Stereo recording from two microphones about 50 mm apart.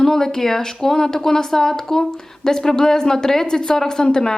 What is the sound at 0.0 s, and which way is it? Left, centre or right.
Speech, centre.